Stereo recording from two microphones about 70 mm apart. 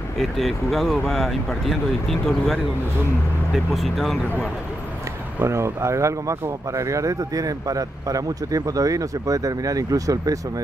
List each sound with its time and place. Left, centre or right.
0.2 s speech: centre
5.4 s speech: right